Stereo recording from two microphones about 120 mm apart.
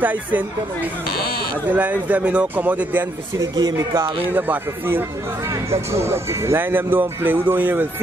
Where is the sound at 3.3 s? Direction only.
30° right (ahead or behind).